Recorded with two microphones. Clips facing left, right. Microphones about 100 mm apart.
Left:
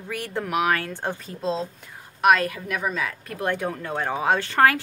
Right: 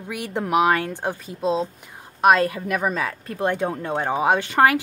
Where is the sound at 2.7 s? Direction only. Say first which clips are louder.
Right 4 dB; 45° right (ahead or behind).